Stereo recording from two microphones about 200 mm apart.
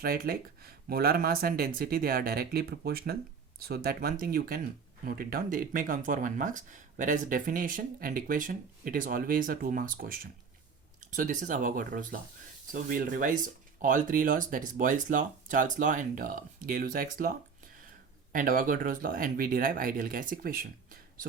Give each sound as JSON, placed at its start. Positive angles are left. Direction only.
{"t": 0.0, "sound": "speech", "side_deg": -50}